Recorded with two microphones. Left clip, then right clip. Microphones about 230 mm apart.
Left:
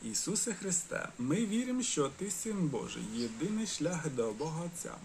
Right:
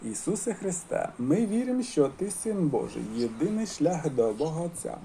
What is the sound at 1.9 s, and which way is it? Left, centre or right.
Speech, centre.